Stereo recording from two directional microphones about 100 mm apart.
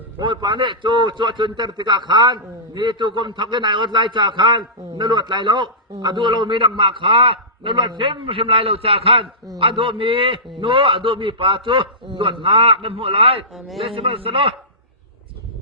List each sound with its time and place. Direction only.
0.2 s a man's voice: 55° right (ahead or behind)
13.5 s a man's voice: centre (ahead or behind)
13.8 s a man's voice: 65° right (ahead or behind)